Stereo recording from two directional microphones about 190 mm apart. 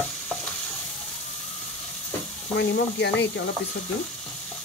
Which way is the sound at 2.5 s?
65° left (ahead or behind).